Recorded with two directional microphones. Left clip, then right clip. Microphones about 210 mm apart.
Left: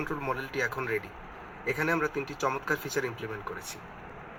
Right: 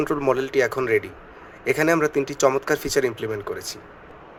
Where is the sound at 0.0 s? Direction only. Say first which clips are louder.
Right 11 dB; 35° right (ahead or behind).